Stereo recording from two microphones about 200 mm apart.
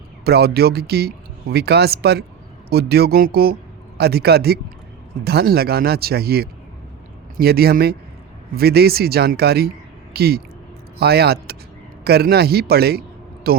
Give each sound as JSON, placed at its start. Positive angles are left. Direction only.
{"t": 0.3, "sound": "a man's voice", "side_deg": -50}